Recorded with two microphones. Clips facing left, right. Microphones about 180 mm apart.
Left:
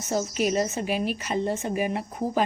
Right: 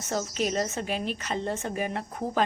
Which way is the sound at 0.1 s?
10° left (ahead or behind).